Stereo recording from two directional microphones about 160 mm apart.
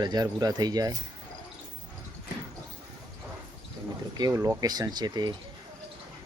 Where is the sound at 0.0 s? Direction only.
25° right (ahead or behind).